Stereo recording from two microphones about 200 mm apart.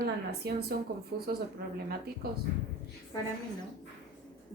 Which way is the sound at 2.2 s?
50° right (ahead or behind).